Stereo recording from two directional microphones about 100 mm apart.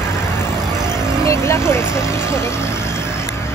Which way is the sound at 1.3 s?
25° left (ahead or behind).